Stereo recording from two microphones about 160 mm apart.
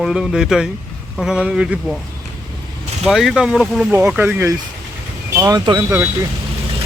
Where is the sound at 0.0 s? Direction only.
5° right (ahead or behind).